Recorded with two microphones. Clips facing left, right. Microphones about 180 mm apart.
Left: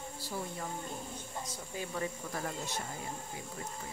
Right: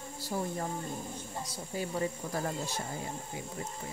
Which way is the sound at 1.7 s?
30° right (ahead or behind).